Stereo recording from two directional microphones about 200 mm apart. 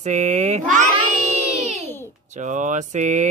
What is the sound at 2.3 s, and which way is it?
Speech, 35° right (ahead or behind).